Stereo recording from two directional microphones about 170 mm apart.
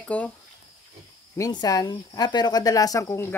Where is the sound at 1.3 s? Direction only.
20° left (ahead or behind).